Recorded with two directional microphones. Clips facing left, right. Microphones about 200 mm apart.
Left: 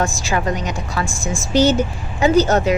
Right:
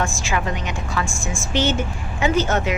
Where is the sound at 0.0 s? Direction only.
35° left (ahead or behind).